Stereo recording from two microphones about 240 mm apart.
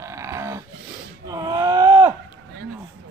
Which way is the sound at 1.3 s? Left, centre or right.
Centre.